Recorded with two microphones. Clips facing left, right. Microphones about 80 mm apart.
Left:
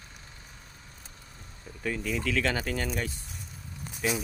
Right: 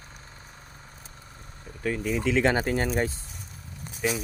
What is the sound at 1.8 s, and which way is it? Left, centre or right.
Speech, centre.